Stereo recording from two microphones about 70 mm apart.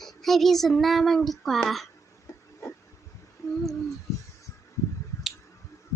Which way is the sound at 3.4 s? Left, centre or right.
Left.